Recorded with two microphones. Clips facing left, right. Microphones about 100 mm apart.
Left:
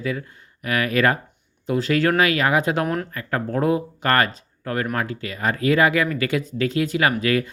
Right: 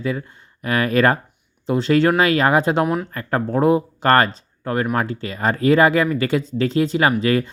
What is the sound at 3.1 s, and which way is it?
Speech, 35° right (ahead or behind).